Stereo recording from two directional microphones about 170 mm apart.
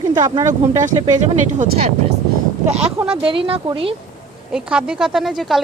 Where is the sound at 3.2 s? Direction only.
30° right (ahead or behind).